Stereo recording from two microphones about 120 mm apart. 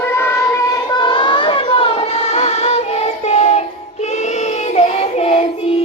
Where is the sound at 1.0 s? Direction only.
40° left (ahead or behind).